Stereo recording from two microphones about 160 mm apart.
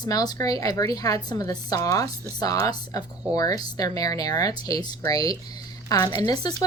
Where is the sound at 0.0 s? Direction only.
25° left (ahead or behind).